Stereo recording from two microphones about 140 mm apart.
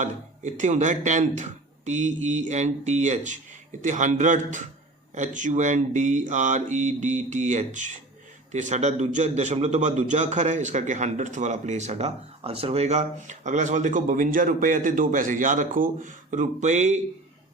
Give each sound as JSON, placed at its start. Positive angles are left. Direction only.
{"t": 0.0, "sound": "a man's voice", "side_deg": -60}